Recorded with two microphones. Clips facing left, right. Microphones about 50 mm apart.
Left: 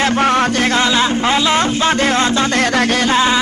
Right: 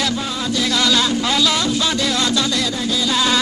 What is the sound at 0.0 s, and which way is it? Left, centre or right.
Music, left.